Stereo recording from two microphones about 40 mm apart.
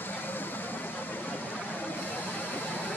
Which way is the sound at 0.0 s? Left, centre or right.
Left.